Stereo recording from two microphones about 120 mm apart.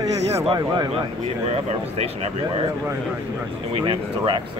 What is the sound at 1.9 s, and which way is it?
Speech, 60° right (ahead or behind).